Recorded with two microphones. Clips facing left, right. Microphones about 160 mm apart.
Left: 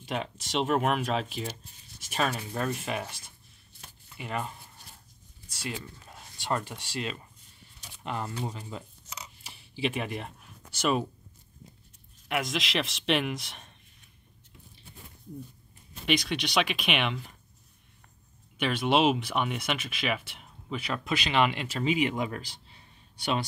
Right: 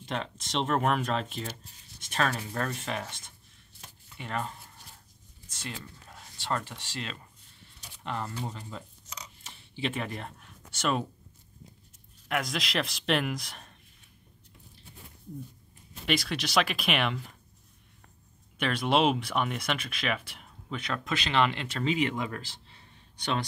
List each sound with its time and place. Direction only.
0.0 s speech: 10° left (ahead or behind)
8.0 s a sound: 15° left (ahead or behind)
10.8 s speech: 10° left (ahead or behind)
12.3 s speech: centre (ahead or behind)
16.1 s speech: centre (ahead or behind)
18.6 s speech: centre (ahead or behind)